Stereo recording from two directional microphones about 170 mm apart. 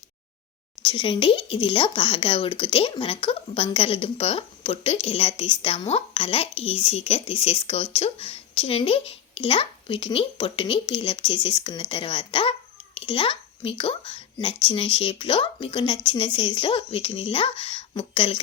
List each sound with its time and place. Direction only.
0.8 s speech: 30° left (ahead or behind)